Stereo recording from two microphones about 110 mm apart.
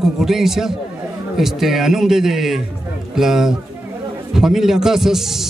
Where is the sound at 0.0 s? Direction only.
5° right (ahead or behind).